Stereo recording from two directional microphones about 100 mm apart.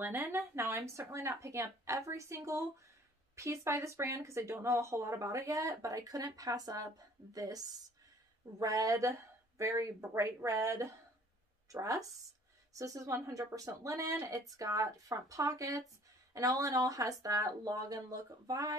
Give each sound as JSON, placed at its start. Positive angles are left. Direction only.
{"t": 0.0, "sound": "speech", "side_deg": -25}